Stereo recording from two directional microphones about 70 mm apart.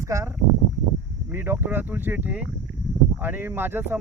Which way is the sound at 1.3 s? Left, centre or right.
Right.